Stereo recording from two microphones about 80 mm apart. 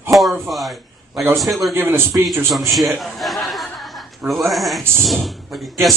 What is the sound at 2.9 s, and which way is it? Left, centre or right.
A man's voice, centre.